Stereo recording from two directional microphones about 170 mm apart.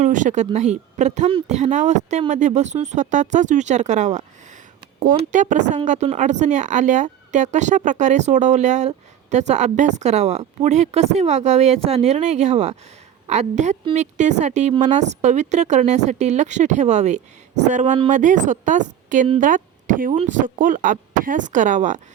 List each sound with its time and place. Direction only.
0.0 s speech: 45° right (ahead or behind)
5.3 s a woman's voice: 45° right (ahead or behind)